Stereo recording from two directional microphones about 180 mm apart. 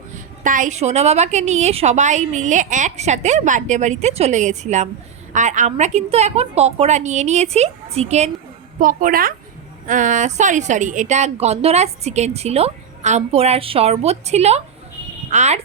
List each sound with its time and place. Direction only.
0.1 s a woman's voice: 45° right (ahead or behind)
8.8 s a woman's voice: 50° right (ahead or behind)